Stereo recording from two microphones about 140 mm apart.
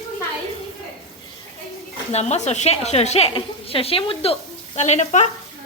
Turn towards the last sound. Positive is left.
turn(degrees=55)  # may be behind; listen again after turning